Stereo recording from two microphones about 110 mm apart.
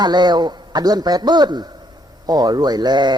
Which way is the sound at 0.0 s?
40° right (ahead or behind).